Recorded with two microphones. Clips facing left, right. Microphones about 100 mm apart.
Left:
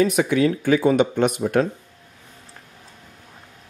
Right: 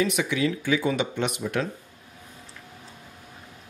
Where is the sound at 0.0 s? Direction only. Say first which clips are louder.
Left 6 dB; 45° left (ahead or behind).